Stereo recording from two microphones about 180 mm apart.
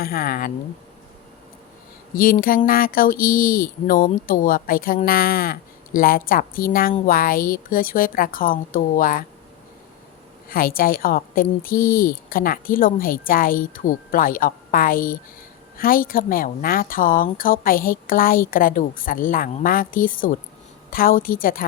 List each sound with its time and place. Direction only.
0.0 s speech: 55° left (ahead or behind)
2.1 s speech: 50° left (ahead or behind)
10.5 s speech: 55° left (ahead or behind)